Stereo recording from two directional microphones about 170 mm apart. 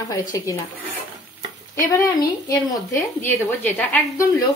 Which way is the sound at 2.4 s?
20° left (ahead or behind).